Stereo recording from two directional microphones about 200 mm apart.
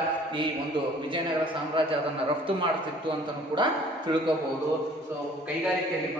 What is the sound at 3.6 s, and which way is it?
Speech, 20° right (ahead or behind).